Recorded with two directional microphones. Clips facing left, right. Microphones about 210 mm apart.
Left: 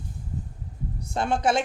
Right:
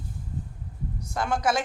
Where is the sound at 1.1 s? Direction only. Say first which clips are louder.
Left 2 dB; 25° left (ahead or behind).